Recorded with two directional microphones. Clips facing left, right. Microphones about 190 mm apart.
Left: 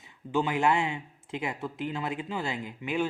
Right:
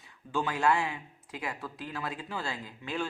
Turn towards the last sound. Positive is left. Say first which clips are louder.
# left 5 dB
turn(degrees=15)  # may be behind; listen again after turning